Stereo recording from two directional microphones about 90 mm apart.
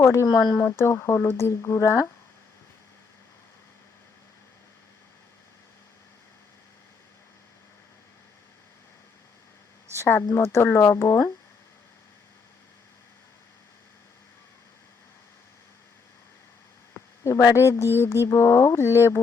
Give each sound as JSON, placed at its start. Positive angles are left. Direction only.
{"t": 0.0, "sound": "speech", "side_deg": 30}
{"t": 0.3, "sound": "speech", "side_deg": 50}
{"t": 0.6, "sound": "speech", "side_deg": 30}
{"t": 9.9, "sound": "speech", "side_deg": 30}
{"t": 16.9, "sound": "speech", "side_deg": 35}